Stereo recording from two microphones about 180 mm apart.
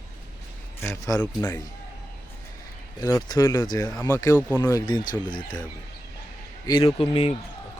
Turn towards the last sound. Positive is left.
turn(degrees=30)  # may be behind; listen again after turning